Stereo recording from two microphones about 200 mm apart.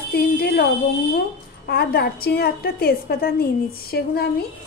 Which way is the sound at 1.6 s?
50° left (ahead or behind).